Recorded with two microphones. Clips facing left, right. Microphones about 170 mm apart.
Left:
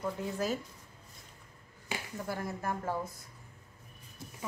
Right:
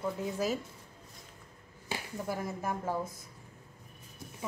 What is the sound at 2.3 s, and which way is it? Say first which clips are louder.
Speech: right 1 dB; 15° right (ahead or behind).